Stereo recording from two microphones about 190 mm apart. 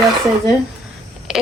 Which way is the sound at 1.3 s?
5° right (ahead or behind).